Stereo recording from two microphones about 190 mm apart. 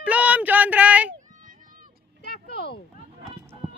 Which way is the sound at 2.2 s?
60° left (ahead or behind).